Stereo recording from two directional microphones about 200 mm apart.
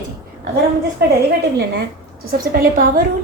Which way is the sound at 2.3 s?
50° right (ahead or behind).